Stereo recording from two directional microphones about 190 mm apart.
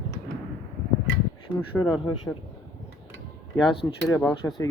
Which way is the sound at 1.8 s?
25° left (ahead or behind).